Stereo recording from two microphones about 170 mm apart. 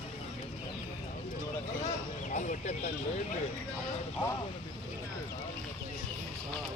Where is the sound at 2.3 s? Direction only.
45° left (ahead or behind).